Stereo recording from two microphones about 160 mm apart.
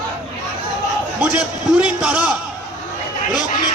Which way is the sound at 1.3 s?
5° right (ahead or behind).